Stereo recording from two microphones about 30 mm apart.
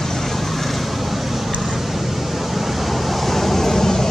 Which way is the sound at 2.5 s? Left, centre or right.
Centre.